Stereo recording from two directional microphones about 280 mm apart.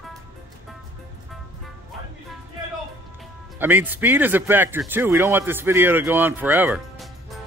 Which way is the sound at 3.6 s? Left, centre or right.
Centre.